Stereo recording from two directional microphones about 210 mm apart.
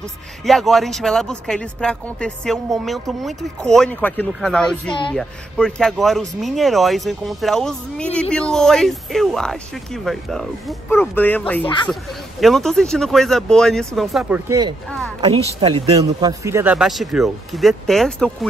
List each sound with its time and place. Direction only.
0.5 s speech: centre (ahead or behind)
11.6 s speech: 20° left (ahead or behind)
11.9 s speech: centre (ahead or behind)
15.1 s speech: 20° right (ahead or behind); by 18.5 s centre (ahead or behind)